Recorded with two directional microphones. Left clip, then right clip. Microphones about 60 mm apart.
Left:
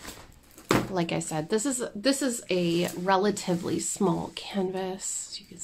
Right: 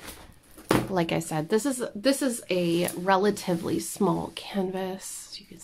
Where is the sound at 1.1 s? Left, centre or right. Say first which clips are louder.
Right 2 dB; right.